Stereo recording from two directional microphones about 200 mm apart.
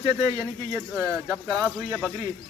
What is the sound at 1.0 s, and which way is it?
Speech, centre (ahead or behind).